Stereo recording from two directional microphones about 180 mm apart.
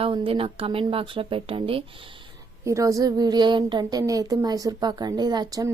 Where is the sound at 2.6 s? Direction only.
15° right (ahead or behind).